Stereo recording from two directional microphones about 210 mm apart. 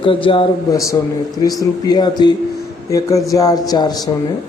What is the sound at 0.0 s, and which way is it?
Speech, 25° left (ahead or behind).